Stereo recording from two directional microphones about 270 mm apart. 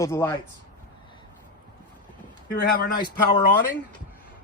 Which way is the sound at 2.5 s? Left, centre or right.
Left.